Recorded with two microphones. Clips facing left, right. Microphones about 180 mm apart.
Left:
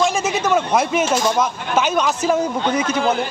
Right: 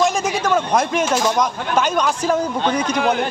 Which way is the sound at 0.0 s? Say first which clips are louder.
Even; 5° left (ahead or behind).